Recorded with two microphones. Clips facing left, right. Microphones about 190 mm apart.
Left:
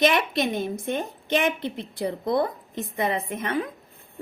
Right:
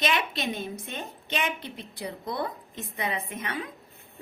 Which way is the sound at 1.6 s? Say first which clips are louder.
Left 8 dB; 55° left (ahead or behind).